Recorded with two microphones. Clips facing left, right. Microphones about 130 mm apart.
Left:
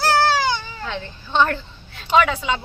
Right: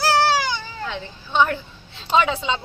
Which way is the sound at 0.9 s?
10° right (ahead or behind).